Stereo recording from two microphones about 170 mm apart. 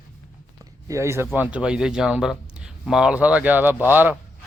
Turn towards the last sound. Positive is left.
turn(degrees=-10)  # may be behind; listen again after turning